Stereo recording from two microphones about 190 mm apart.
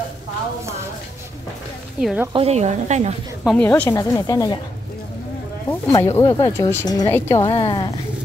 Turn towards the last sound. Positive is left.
turn(degrees=25)  # may be behind; listen again after turning